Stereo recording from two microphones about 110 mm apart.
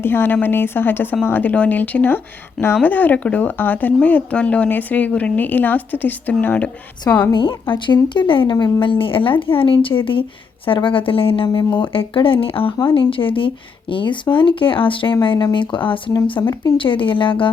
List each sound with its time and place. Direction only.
0.0 s a woman's voice: 20° left (ahead or behind)
7.1 s a woman's voice: 25° left (ahead or behind)
8.1 s speech: 45° left (ahead or behind)
11.4 s speech: 40° left (ahead or behind)
12.7 s speech: 45° left (ahead or behind)
16.4 s speech: 30° left (ahead or behind)
16.7 s speech: 50° left (ahead or behind)